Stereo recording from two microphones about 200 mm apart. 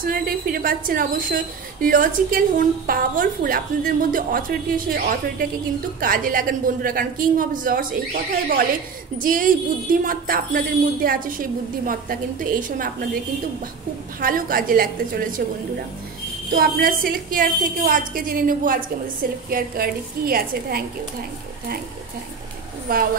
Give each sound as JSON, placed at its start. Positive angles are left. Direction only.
{"t": 0.0, "sound": "a woman's voice", "side_deg": -45}
{"t": 14.2, "sound": "a woman's voice", "side_deg": -45}
{"t": 16.5, "sound": "a woman's voice", "side_deg": -50}
{"t": 22.9, "sound": "a woman's voice", "side_deg": -45}